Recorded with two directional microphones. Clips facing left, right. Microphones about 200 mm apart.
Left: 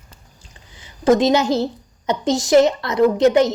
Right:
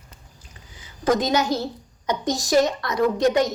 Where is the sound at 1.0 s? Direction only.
25° left (ahead or behind).